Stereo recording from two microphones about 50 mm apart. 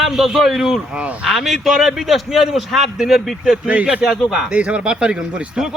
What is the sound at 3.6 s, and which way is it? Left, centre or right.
Speech, right.